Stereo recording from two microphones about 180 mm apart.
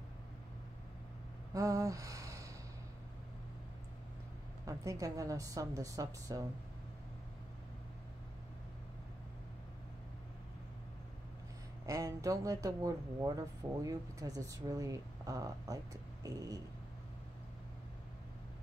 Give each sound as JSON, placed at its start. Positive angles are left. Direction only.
{"t": 1.5, "sound": "a sound", "side_deg": -20}
{"t": 4.6, "sound": "speech", "side_deg": -20}
{"t": 11.8, "sound": "speech", "side_deg": -20}